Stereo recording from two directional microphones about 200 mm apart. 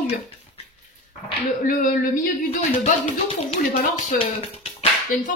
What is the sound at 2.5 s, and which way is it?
Speech, 35° left (ahead or behind).